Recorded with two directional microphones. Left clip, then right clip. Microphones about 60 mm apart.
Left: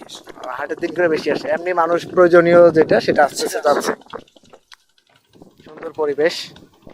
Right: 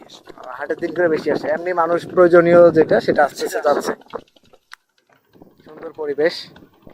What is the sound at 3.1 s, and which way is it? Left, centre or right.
Speech, centre.